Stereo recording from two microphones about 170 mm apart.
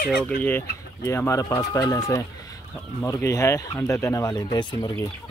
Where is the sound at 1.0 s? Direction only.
15° left (ahead or behind).